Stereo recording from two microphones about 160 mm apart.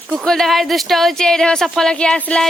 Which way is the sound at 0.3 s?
Centre (ahead or behind).